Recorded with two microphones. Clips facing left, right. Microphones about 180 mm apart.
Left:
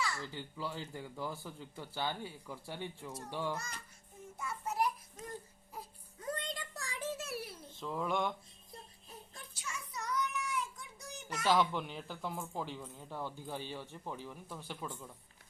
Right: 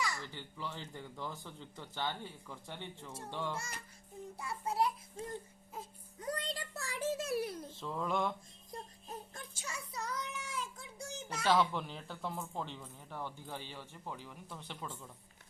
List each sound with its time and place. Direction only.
0.0 s babbling: 15° right (ahead or behind)
0.3 s a man's voice: 10° left (ahead or behind)
4.4 s a child's voice: 30° right (ahead or behind)
5.7 s baby cry: 25° right (ahead or behind)
6.6 s a sound: 40° right (ahead or behind)
7.8 s a sound: centre (ahead or behind)
8.7 s child singing: 45° right (ahead or behind); by 11.4 s 30° right (ahead or behind)
11.7 s a man's voice: centre (ahead or behind)